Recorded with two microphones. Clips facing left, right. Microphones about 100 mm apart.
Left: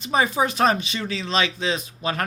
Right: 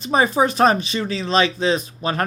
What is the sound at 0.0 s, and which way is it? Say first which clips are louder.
Speech: right 4 dB; 40° right (ahead or behind).